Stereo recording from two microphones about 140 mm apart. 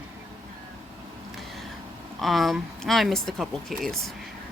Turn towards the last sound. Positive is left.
turn(degrees=5)  # may be behind; listen again after turning